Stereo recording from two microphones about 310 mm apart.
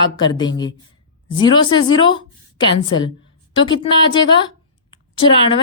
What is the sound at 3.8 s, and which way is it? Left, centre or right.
A woman's voice, centre.